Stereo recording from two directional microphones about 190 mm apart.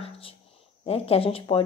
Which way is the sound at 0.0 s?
30° left (ahead or behind).